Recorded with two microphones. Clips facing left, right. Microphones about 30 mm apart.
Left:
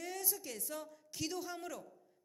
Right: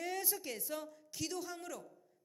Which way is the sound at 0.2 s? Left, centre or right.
Right.